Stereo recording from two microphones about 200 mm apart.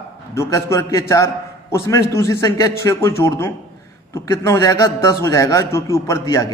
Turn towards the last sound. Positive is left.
turn(degrees=15)  # may be behind; listen again after turning